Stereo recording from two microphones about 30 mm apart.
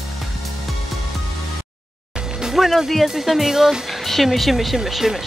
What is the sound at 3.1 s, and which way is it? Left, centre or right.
Speech, centre.